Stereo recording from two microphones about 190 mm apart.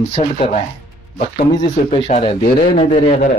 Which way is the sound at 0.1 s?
35° left (ahead or behind).